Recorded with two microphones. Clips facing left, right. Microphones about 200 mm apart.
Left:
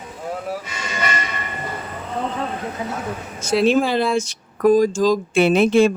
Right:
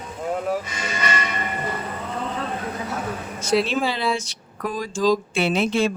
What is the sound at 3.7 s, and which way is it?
A woman's voice, 50° left (ahead or behind).